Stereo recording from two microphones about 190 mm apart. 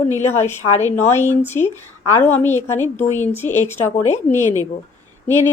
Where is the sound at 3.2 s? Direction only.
10° left (ahead or behind).